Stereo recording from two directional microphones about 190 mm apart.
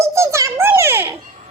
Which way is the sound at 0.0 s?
15° right (ahead or behind).